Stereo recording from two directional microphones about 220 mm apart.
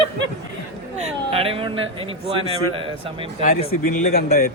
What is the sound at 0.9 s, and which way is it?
A man's voice, 30° right (ahead or behind).